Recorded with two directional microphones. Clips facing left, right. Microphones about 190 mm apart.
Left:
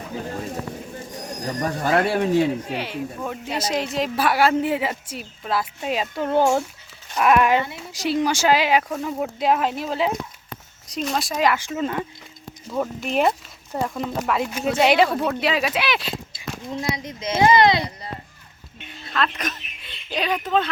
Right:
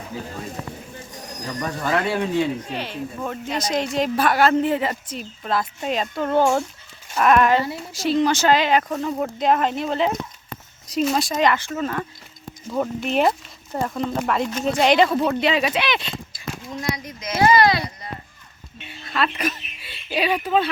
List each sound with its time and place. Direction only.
1.5 s speech: 40° left (ahead or behind)
2.6 s speech: 10° left (ahead or behind)
12.7 s speech: centre (ahead or behind)
16.7 s speech: 25° left (ahead or behind)
18.9 s speech: 5° right (ahead or behind)